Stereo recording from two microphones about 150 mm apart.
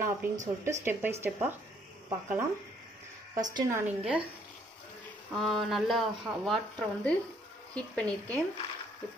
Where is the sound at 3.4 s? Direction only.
20° right (ahead or behind).